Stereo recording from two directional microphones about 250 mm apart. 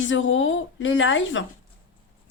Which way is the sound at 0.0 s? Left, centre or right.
Left.